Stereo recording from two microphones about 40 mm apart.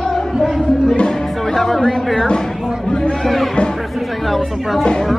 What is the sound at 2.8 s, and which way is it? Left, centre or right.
Speech, centre.